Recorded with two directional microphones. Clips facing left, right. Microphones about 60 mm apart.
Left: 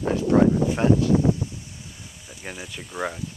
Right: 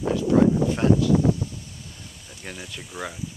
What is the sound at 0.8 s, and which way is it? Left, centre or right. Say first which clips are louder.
Speech: left 1 dB; centre.